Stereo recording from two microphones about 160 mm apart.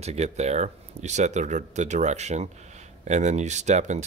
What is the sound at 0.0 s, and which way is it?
Speech, 45° right (ahead or behind).